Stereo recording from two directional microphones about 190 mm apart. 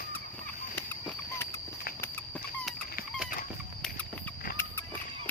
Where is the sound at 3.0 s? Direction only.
50° left (ahead or behind).